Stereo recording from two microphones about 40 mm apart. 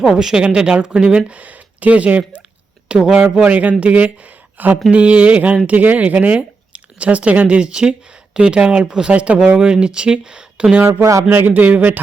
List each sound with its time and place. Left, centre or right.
0.0 s speech: centre; by 2.4 s right
2.9 s speech: right
3.4 s speech: right
4.9 s speech: right
10.8 s speech: right
11.5 s a man's voice: right